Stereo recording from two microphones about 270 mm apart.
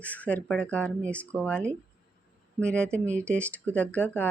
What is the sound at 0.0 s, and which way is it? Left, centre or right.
Speech, centre.